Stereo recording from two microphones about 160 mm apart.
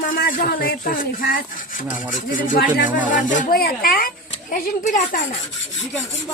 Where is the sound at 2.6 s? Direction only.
70° left (ahead or behind).